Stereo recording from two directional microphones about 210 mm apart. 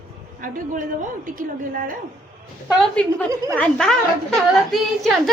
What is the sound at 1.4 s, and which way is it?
Speech, 40° right (ahead or behind).